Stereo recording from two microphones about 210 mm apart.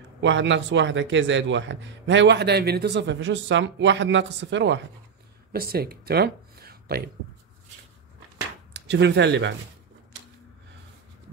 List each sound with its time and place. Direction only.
0.2 s a man's voice: 60° right (ahead or behind)
5.5 s speech: 45° right (ahead or behind)
8.7 s speech: 55° right (ahead or behind)